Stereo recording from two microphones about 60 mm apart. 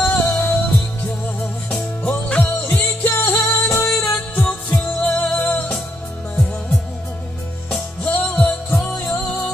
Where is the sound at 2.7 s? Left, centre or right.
Left.